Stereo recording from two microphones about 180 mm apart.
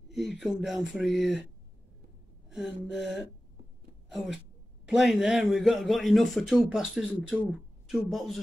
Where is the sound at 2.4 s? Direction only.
5° right (ahead or behind).